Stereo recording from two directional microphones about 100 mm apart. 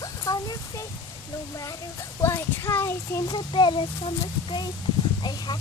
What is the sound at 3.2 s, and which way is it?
Speech, 50° left (ahead or behind).